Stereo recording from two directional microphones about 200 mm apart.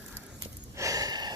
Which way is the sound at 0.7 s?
15° right (ahead or behind).